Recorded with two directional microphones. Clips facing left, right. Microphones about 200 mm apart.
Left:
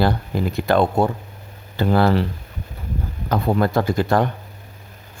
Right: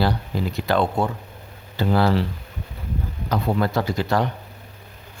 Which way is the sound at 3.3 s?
50° left (ahead or behind).